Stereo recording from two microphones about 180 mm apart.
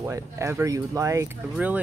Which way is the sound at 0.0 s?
15° right (ahead or behind).